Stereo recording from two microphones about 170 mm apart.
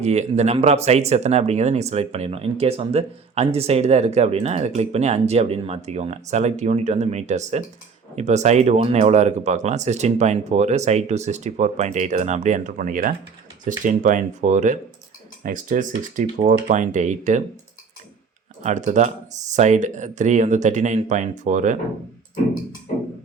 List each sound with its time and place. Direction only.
0.0 s speech: 40° right (ahead or behind)
18.6 s speech: 45° right (ahead or behind)